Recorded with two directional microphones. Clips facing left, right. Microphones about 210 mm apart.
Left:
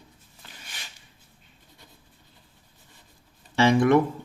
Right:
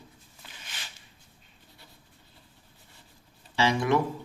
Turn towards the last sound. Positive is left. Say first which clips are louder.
# left 6 dB
turn(degrees=55)  # may be behind; listen again after turning